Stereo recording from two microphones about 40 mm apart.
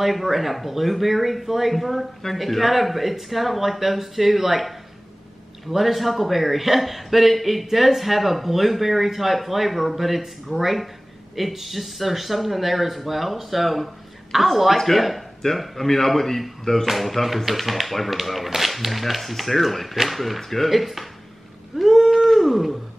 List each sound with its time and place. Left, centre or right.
0.0 s a man's voice: centre
21.7 s whale vocalization: centre